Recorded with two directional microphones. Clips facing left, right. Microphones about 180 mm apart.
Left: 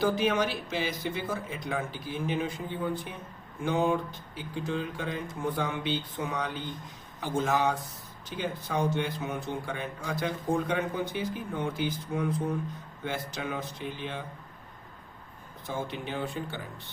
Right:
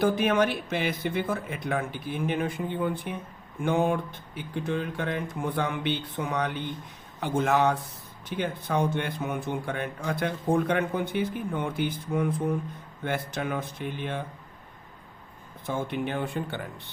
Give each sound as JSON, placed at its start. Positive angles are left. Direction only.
{"t": 0.0, "sound": "speech", "side_deg": -55}
{"t": 15.6, "sound": "speech", "side_deg": -55}